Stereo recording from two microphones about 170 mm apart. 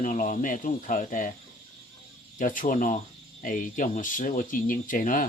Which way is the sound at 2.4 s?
50° left (ahead or behind).